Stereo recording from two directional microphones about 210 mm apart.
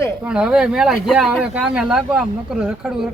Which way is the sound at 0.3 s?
5° right (ahead or behind).